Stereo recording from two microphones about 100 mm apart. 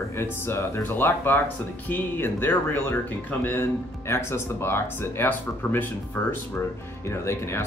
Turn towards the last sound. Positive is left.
turn(degrees=25)  # may be behind; listen again after turning